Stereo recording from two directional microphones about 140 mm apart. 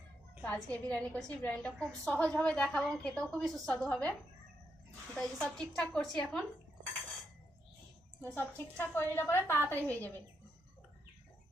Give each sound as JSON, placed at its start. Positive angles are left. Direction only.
{"t": 0.4, "sound": "a woman's voice", "side_deg": 10}
{"t": 5.1, "sound": "a woman's voice", "side_deg": 5}
{"t": 8.2, "sound": "a woman's voice", "side_deg": 15}